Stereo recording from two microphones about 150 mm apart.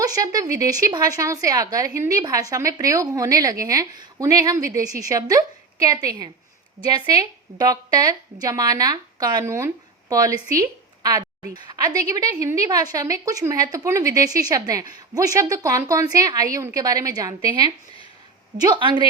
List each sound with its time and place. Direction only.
0.0 s speech: 25° right (ahead or behind)